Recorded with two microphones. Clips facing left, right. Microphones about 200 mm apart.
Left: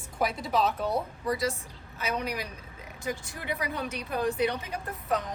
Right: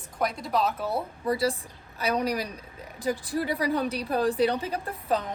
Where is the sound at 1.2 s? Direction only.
30° right (ahead or behind).